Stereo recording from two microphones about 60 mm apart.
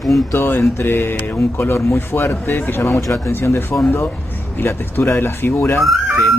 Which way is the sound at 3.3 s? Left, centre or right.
Left.